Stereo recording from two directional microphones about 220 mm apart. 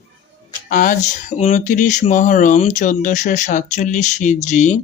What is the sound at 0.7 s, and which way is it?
Speech, 35° left (ahead or behind).